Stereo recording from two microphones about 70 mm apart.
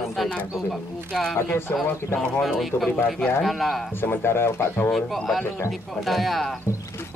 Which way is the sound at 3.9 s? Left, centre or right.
Left.